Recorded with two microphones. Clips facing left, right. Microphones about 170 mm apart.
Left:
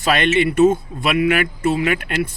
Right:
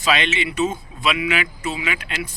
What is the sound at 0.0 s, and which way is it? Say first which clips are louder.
Speech: left 5 dB; 55° left (ahead or behind).